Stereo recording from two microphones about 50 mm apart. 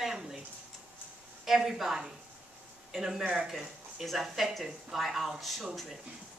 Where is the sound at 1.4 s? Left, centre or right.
Centre.